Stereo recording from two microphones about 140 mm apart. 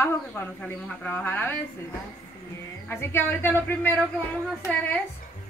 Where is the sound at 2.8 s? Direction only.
15° left (ahead or behind).